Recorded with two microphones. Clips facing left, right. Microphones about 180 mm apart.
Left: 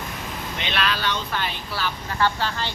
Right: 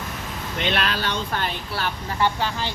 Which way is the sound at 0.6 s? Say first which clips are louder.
Right 2 dB; 45° right (ahead or behind).